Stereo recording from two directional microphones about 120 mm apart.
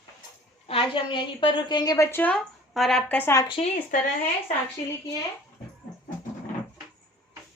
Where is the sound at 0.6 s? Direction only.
50° left (ahead or behind); by 2.2 s 25° left (ahead or behind).